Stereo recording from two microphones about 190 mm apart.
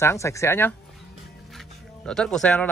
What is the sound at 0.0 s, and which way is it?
A man's voice, 15° left (ahead or behind).